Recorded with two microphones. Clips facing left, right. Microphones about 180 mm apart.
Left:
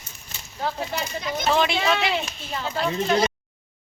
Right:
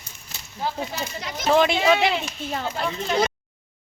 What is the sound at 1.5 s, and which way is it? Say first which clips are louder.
Speech: right 4 dB; 50° right (ahead or behind).